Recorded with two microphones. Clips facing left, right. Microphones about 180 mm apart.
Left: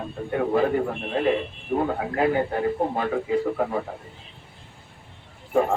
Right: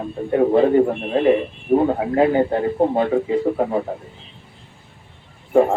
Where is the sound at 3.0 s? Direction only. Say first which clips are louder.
Right 6 dB; 30° right (ahead or behind).